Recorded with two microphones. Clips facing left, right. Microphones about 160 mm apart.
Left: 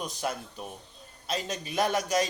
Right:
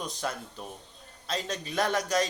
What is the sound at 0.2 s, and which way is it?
A man's voice, 10° left (ahead or behind).